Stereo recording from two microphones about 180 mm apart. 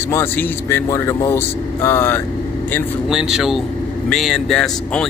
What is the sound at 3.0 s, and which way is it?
Speech, 5° right (ahead or behind).